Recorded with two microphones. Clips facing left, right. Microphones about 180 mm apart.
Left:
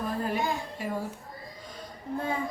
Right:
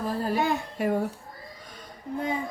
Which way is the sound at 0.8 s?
60° right (ahead or behind).